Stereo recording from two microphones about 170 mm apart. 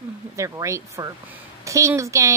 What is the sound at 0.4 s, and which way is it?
A woman's voice, 20° right (ahead or behind).